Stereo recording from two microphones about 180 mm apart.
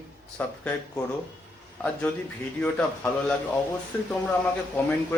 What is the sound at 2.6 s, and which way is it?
Speech, 5° left (ahead or behind).